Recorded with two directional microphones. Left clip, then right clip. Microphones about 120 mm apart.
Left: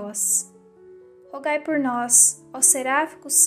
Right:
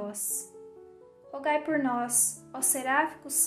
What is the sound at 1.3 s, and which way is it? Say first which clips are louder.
A woman's voice: left 4 dB; 40° left (ahead or behind).